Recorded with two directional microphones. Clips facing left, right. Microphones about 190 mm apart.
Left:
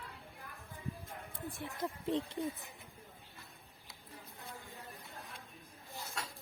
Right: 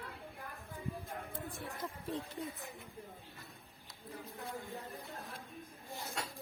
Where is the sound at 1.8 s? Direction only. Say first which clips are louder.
Left 7 dB; 20° left (ahead or behind).